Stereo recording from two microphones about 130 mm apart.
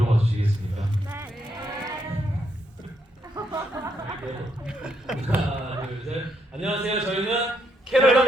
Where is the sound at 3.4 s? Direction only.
30° right (ahead or behind).